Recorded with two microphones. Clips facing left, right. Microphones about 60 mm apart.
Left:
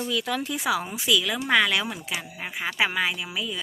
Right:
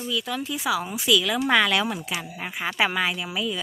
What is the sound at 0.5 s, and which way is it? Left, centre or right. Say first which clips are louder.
Speech: right 1 dB; left.